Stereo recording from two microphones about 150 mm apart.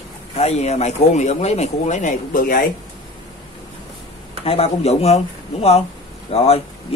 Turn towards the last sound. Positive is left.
turn(degrees=40)  # may be behind; listen again after turning